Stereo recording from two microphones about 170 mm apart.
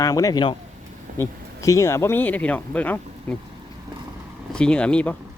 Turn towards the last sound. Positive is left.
turn(degrees=5)  # may be behind; listen again after turning